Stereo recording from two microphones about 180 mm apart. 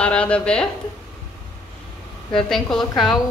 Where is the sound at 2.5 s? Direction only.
Centre (ahead or behind).